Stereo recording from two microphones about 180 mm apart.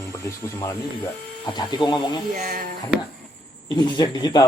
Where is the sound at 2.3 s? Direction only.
45° right (ahead or behind).